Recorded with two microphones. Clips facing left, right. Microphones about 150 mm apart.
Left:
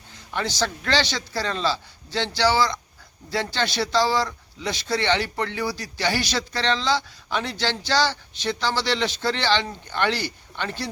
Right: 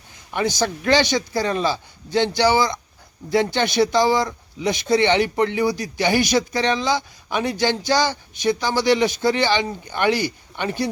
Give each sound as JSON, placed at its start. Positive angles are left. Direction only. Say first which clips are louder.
{"t": 0.3, "sound": "speech", "louder": "right 4 dB", "side_deg": -15}